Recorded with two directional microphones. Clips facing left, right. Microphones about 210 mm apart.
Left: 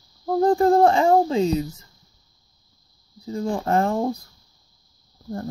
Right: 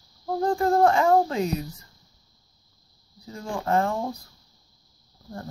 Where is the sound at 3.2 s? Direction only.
35° left (ahead or behind).